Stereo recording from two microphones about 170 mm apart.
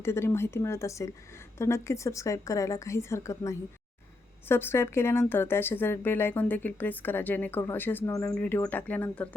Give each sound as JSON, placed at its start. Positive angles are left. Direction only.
{"t": 0.0, "sound": "speech", "side_deg": 15}